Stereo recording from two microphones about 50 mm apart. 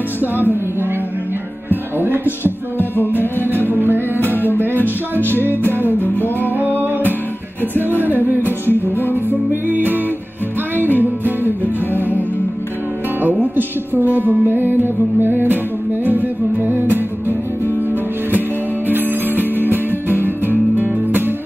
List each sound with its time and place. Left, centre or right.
1.7 s music: right
2.8 s music: left
3.4 s music: right
4.4 s music: left
4.8 s music: right
5.9 s music: left
6.5 s music: right
8.6 s music: left
9.5 s music: right
14.1 s music: right
18.9 s music: right